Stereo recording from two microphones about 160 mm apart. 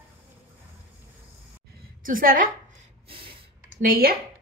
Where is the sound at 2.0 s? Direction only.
60° right (ahead or behind).